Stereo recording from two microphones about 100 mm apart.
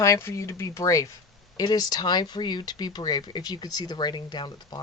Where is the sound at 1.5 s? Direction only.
45° left (ahead or behind).